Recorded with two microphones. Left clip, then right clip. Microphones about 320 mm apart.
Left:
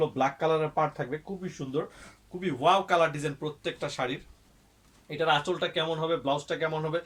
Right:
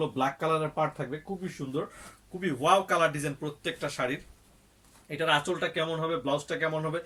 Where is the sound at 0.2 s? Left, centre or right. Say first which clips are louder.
Right 1 dB; centre.